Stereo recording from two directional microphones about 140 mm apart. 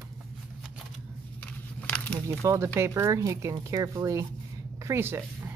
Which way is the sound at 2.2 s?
20° right (ahead or behind).